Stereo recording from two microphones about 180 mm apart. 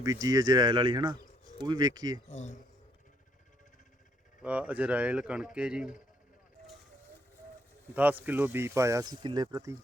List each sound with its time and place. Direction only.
0.0 s speech: 20° right (ahead or behind)
2.3 s speech: 40° left (ahead or behind)
4.4 s speech: 10° right (ahead or behind)
8.2 s speech: 10° right (ahead or behind)